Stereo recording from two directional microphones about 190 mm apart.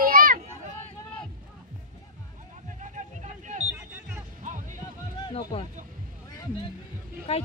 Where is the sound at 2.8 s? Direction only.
40° right (ahead or behind).